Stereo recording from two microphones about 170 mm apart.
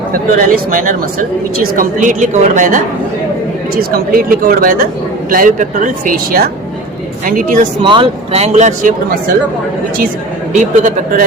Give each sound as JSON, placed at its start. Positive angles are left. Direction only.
{"t": 0.1, "sound": "speech", "side_deg": -55}
{"t": 3.8, "sound": "speech", "side_deg": -60}
{"t": 7.8, "sound": "speech", "side_deg": -30}
{"t": 10.5, "sound": "a man's voice", "side_deg": -45}